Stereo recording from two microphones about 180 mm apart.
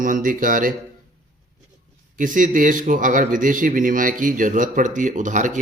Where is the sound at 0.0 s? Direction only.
50° right (ahead or behind).